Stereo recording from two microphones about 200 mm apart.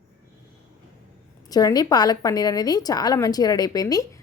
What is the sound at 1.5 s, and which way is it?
A woman's voice, 20° left (ahead or behind).